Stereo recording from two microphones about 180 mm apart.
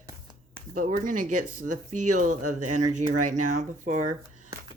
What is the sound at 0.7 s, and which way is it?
Speech, 45° right (ahead or behind).